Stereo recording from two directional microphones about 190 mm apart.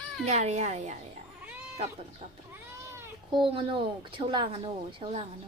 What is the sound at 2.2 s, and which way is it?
Speech, 35° right (ahead or behind).